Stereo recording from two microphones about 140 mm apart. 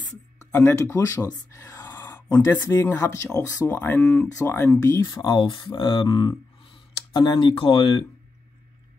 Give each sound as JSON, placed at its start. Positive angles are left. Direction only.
{"t": 0.5, "sound": "speech", "side_deg": 15}